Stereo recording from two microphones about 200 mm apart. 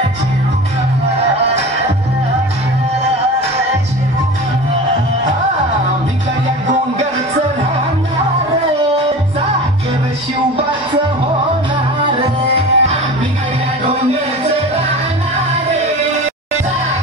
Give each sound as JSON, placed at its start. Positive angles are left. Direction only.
{"t": 12.2, "sound": "music", "side_deg": -30}